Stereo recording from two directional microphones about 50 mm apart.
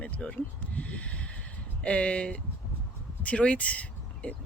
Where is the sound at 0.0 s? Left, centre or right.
Left.